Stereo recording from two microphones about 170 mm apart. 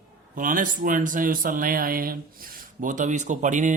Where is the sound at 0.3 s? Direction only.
55° right (ahead or behind).